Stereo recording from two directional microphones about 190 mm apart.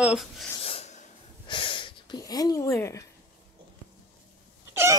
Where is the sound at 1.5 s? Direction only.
25° left (ahead or behind).